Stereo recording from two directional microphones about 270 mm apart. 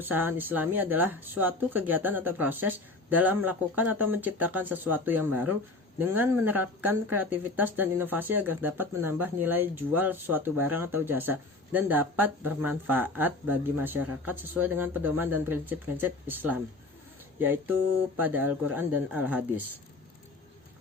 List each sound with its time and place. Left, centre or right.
0.0 s speech: centre